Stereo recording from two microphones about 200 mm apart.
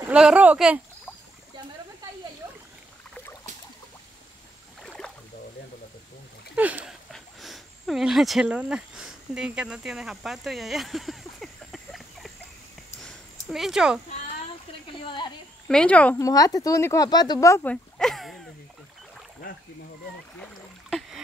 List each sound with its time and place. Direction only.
0.0 s speech: 5° right (ahead or behind)
4.8 s rowboat: 5° left (ahead or behind)
6.5 s speech: 5° right (ahead or behind)
13.0 s a sound: centre (ahead or behind)
15.0 s speech: 25° left (ahead or behind)
15.7 s speech: 5° left (ahead or behind)
17.9 s a sound: centre (ahead or behind)